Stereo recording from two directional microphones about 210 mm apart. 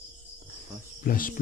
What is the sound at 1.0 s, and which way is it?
Speech, 40° left (ahead or behind).